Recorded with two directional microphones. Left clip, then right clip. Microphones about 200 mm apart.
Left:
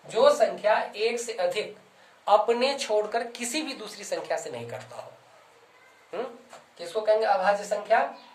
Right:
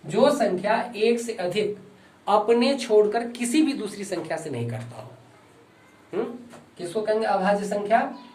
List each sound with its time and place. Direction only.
0.1 s a sound: 15° left (ahead or behind)
1.1 s a man's voice: 30° left (ahead or behind)
6.7 s speech: 20° left (ahead or behind)